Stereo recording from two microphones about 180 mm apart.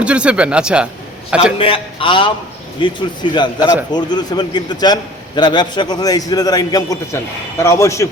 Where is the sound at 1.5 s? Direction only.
30° left (ahead or behind).